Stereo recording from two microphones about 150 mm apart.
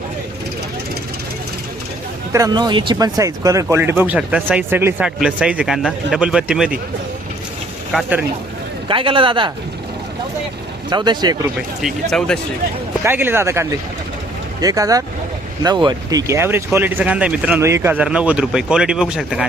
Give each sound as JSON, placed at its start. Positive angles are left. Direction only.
{"t": 2.3, "sound": "speech", "side_deg": -25}
{"t": 5.0, "sound": "speech", "side_deg": -5}
{"t": 8.9, "sound": "speech", "side_deg": -35}
{"t": 10.8, "sound": "speech", "side_deg": -30}
{"t": 12.1, "sound": "speech", "side_deg": 5}
{"t": 13.1, "sound": "speech", "side_deg": -15}